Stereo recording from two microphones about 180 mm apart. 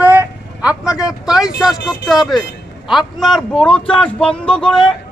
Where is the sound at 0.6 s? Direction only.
5° right (ahead or behind).